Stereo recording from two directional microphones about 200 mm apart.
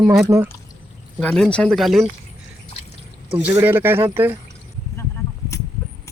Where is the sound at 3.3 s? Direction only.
10° right (ahead or behind).